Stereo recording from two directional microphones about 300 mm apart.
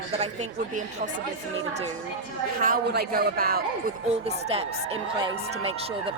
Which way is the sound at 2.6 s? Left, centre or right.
Right.